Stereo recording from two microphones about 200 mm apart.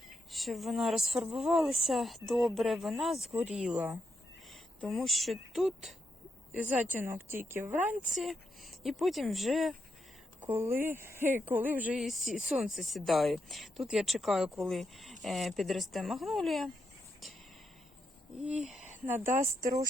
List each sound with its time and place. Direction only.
0.3 s speech: centre (ahead or behind)
6.9 s speech: 10° right (ahead or behind)
8.1 s speech: centre (ahead or behind)
10.4 s speech: 10° right (ahead or behind)
18.4 s speech: 5° right (ahead or behind)
19.2 s speech: 40° right (ahead or behind)